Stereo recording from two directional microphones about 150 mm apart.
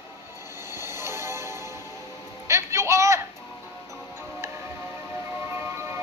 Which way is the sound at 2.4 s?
20° right (ahead or behind).